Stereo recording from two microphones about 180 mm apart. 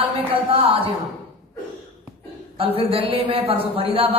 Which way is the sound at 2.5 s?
30° right (ahead or behind).